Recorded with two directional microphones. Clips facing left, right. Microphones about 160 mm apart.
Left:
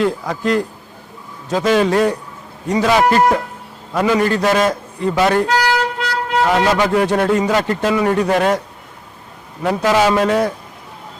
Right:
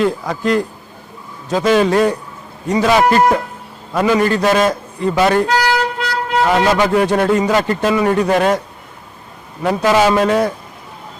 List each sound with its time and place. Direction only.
0.0 s a man's voice: 15° right (ahead or behind)
9.6 s a man's voice: 20° right (ahead or behind)